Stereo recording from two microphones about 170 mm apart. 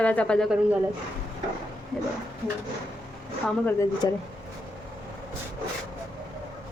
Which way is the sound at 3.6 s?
20° left (ahead or behind).